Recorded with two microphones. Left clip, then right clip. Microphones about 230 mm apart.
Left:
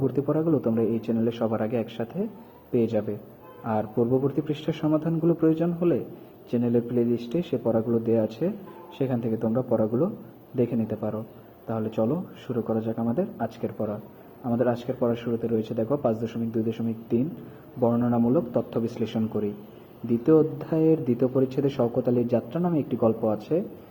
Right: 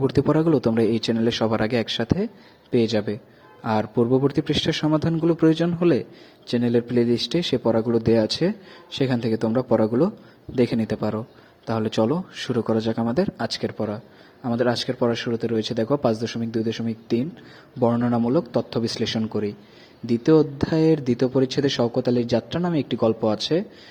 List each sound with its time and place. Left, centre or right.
0.1 s a man's voice: right